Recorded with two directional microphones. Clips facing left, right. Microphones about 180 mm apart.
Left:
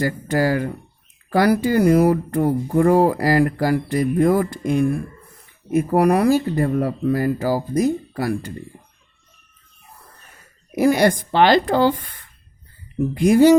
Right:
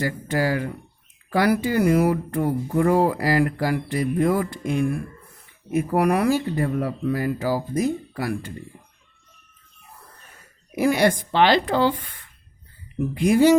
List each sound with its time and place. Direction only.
0.0 s speech: 45° left (ahead or behind)
10.7 s speech: 40° left (ahead or behind)